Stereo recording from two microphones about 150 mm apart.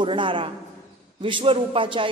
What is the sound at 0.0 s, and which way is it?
A man's voice, 35° right (ahead or behind).